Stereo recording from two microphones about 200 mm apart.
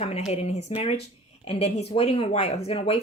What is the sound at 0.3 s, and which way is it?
Speech, 30° left (ahead or behind).